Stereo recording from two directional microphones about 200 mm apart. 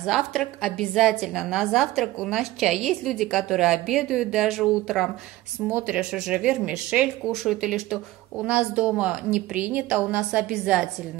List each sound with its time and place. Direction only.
0.0 s speech: centre (ahead or behind)